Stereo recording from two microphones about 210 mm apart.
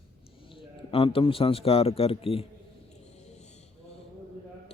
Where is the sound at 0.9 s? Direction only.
25° left (ahead or behind).